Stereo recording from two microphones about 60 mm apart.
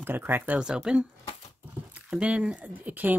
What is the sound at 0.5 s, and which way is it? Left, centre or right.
Speech, centre.